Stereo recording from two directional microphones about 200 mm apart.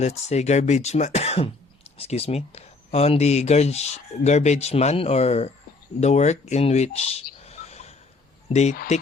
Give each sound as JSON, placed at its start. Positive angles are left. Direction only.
{"t": 0.0, "sound": "speech", "side_deg": 35}
{"t": 7.3, "sound": "frog", "side_deg": 30}
{"t": 8.4, "sound": "speech", "side_deg": 35}